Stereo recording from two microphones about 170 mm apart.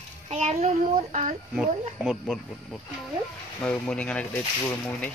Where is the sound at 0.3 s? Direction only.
40° right (ahead or behind).